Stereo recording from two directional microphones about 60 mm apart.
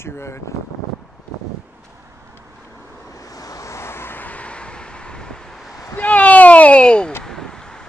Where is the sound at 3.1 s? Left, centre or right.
Left.